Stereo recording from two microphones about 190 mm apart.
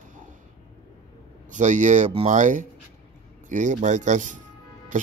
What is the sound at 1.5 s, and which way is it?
Speech, 40° right (ahead or behind).